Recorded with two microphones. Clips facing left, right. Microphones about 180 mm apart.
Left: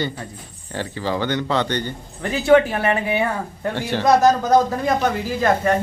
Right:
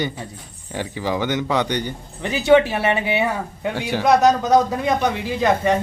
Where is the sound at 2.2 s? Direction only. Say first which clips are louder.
Even; centre (ahead or behind).